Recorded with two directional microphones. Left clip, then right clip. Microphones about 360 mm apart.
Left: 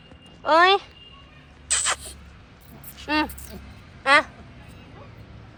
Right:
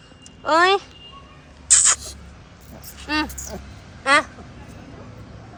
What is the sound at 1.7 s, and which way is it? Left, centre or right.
Rodents, centre.